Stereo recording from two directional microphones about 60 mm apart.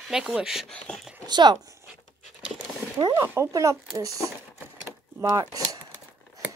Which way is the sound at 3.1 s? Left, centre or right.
Right.